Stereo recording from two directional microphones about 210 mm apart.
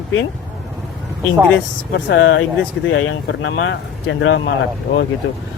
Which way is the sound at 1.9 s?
60° left (ahead or behind).